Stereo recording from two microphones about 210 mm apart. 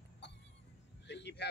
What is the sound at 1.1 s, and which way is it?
Speech, 55° left (ahead or behind).